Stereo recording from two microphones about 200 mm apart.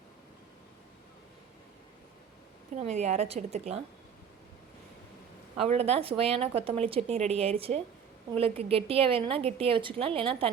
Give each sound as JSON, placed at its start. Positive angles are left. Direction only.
{"t": 2.7, "sound": "a woman's voice", "side_deg": -35}
{"t": 5.5, "sound": "a woman's voice", "side_deg": -30}